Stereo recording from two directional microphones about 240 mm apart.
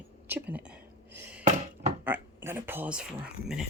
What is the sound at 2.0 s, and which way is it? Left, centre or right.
A man's voice, centre.